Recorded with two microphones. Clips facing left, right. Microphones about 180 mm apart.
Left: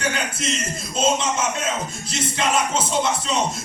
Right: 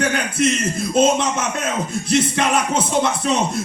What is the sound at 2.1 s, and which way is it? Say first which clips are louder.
Music: right 5 dB; 60° right (ahead or behind).